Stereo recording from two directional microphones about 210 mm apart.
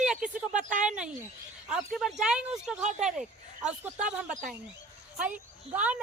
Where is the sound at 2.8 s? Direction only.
35° right (ahead or behind).